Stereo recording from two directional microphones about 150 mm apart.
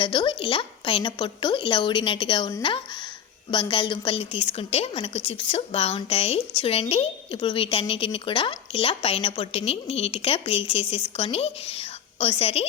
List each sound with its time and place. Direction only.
0.0 s a woman's voice: 35° left (ahead or behind)